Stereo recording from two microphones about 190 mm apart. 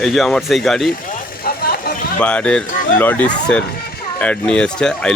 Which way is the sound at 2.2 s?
5° left (ahead or behind).